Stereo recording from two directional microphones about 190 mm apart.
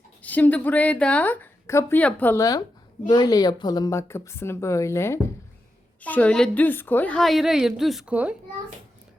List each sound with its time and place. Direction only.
0.2 s a woman's voice: 10° left (ahead or behind)